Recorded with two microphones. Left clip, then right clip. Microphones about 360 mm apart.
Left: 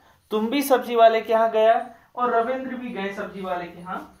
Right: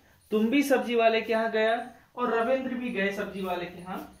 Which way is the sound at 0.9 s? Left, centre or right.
Left.